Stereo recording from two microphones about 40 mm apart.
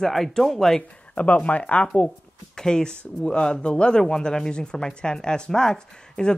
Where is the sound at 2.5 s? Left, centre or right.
Centre.